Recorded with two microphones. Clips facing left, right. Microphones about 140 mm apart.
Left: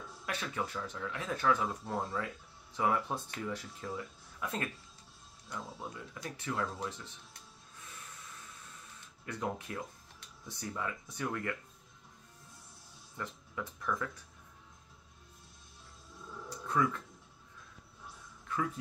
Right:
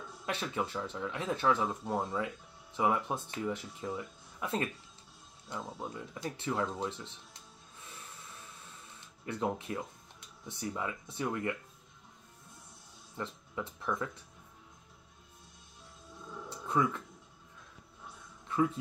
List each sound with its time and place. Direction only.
0.2 s speech: 25° right (ahead or behind)
9.2 s speech: 25° right (ahead or behind)
13.1 s speech: 25° right (ahead or behind)
16.4 s a sound: 20° right (ahead or behind)
18.5 s dog: 25° right (ahead or behind)